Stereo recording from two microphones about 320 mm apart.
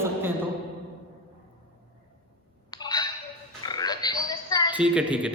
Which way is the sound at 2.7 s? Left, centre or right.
Centre.